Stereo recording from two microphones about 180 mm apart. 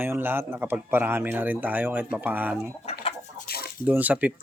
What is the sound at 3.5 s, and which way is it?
Chicken, 60° left (ahead or behind).